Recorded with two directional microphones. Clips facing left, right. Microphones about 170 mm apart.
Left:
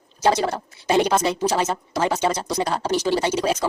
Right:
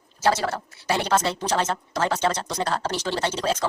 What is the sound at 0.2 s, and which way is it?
A woman's voice, 15° left (ahead or behind).